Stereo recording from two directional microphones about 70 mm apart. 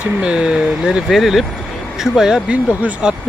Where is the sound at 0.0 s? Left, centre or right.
Centre.